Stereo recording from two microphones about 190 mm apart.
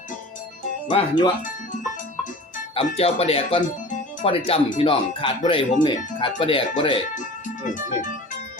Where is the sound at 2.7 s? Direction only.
30° left (ahead or behind).